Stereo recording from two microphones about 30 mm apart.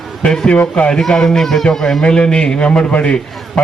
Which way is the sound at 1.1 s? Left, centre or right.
Centre.